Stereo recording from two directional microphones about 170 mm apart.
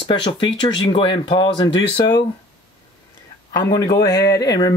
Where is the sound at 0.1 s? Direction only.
25° left (ahead or behind).